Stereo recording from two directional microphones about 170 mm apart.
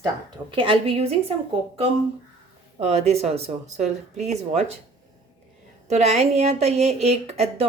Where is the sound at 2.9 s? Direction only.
40° right (ahead or behind).